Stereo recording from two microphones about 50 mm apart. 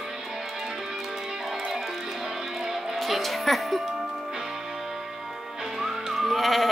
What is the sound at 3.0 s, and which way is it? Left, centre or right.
Speech, centre.